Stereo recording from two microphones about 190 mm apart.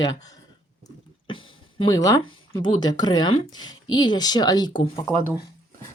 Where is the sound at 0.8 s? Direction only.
25° left (ahead or behind).